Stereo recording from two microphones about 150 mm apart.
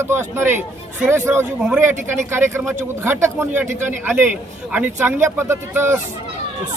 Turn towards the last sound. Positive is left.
turn(degrees=-15)  # may be behind; listen again after turning